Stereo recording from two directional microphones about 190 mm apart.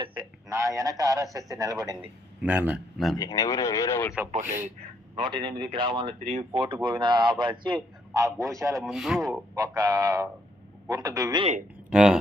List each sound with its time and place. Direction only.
0.2 s a man's voice: 15° right (ahead or behind)
2.0 s a man's voice: 5° right (ahead or behind)
3.2 s speech: 15° left (ahead or behind)
4.3 s a man's voice: 35° right (ahead or behind)
5.1 s a man's voice: 25° right (ahead or behind)
8.5 s a sound: 15° right (ahead or behind)
8.8 s speech: centre (ahead or behind)
9.6 s a sound: 15° right (ahead or behind)
10.9 s a man's voice: 20° right (ahead or behind)
11.9 s speech: 5° right (ahead or behind)